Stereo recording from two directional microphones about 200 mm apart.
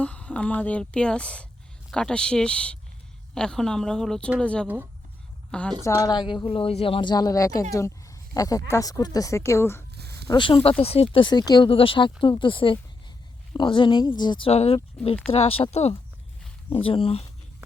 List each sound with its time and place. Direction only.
0.0 s a woman's voice: 5° left (ahead or behind)
5.8 s speech: 15° left (ahead or behind)
9.9 s a sound: 55° right (ahead or behind)
10.2 s speech: 25° left (ahead or behind)
15.0 s speech: 5° left (ahead or behind)
15.3 s speech: 30° left (ahead or behind)